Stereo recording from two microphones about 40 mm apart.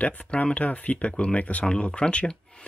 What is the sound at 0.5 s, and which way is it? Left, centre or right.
Speech, left.